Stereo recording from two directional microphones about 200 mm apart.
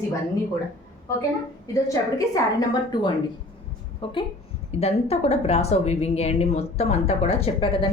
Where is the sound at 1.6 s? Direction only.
15° left (ahead or behind).